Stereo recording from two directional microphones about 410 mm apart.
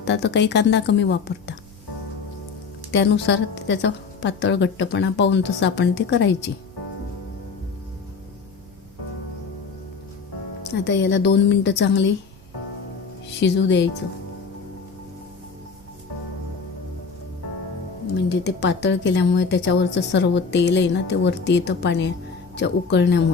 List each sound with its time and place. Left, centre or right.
0.0 s speech: left
2.9 s speech: left
10.6 s speech: left
13.4 s speech: left
18.3 s speech: left